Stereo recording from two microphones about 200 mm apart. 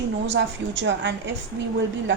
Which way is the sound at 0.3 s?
65° right (ahead or behind).